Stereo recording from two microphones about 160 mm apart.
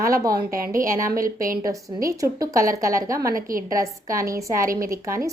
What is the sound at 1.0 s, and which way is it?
Speech, 60° right (ahead or behind).